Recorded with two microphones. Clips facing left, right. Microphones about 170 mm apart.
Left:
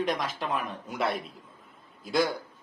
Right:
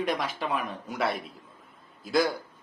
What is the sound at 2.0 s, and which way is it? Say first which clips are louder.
Speech: right 1 dB; centre (ahead or behind).